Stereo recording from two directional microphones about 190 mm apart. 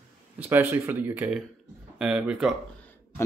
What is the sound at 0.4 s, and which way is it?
Speech, 10° right (ahead or behind).